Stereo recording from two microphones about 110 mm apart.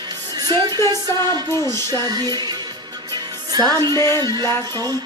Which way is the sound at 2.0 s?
35° right (ahead or behind).